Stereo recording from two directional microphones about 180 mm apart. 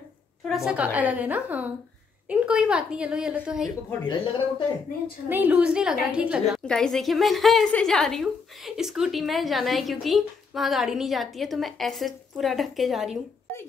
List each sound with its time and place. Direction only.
0.5 s a woman's voice: 5° right (ahead or behind)
4.0 s speech: 25° left (ahead or behind)
5.3 s a woman's voice: 10° right (ahead or behind)